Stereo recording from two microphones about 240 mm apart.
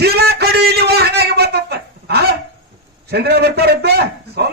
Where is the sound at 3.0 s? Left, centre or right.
Right.